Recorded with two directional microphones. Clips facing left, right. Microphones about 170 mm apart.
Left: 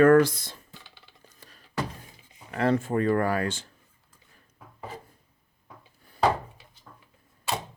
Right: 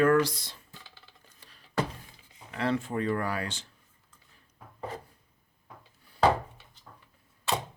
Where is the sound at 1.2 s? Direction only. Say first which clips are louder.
Left 5 dB; 45° left (ahead or behind).